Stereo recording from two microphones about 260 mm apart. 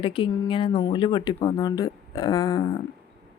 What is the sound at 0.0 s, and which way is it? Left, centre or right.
A woman's voice, centre.